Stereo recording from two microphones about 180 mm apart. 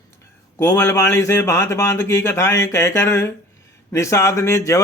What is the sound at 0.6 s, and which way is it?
A man's voice, 15° left (ahead or behind).